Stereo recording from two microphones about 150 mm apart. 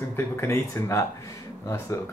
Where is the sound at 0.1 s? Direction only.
20° left (ahead or behind).